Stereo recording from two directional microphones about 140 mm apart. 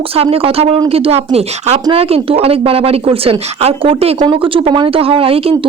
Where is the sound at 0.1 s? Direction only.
45° right (ahead or behind).